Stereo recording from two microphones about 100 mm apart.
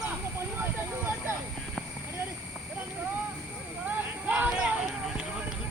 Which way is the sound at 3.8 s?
15° right (ahead or behind).